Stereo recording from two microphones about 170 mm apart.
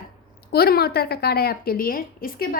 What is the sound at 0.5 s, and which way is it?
A woman's voice, 65° left (ahead or behind).